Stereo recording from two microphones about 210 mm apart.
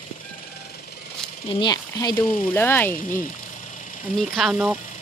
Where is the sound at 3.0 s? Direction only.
40° left (ahead or behind).